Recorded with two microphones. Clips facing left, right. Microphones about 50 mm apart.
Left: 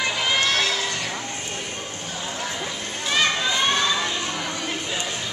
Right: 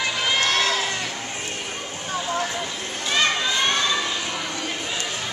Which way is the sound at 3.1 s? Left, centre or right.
Centre.